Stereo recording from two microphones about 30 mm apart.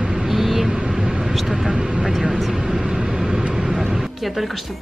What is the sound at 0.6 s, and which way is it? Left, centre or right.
Vehicle, right.